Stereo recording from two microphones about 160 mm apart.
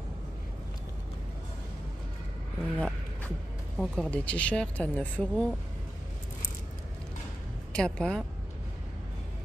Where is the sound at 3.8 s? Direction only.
5° left (ahead or behind).